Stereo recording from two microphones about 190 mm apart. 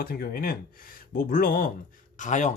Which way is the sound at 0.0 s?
50° left (ahead or behind).